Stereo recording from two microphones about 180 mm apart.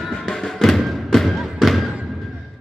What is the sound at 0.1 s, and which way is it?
Music, centre (ahead or behind).